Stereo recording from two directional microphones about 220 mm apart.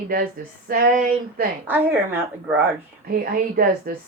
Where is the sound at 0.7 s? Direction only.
40° right (ahead or behind).